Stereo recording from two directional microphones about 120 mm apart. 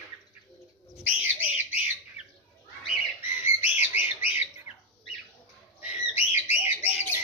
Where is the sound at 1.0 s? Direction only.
15° right (ahead or behind).